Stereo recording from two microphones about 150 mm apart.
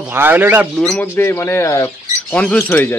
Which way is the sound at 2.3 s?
5° left (ahead or behind).